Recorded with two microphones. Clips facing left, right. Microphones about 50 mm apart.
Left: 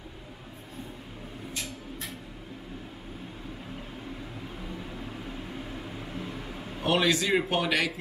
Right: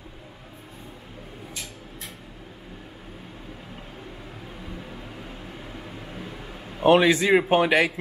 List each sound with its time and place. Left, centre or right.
6.8 s a man's voice: right